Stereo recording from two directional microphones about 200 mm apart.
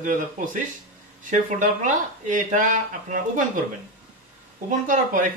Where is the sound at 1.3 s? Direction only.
40° right (ahead or behind).